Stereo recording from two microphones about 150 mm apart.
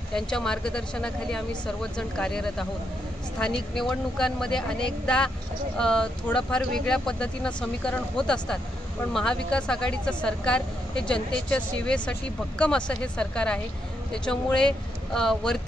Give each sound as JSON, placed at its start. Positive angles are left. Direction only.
{"t": 0.1, "sound": "a woman's voice", "side_deg": 5}